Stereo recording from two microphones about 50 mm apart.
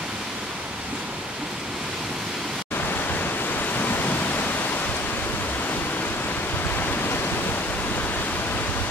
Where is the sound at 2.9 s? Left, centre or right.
Left.